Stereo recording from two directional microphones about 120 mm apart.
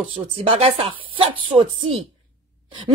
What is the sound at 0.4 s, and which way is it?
Speech, 55° right (ahead or behind).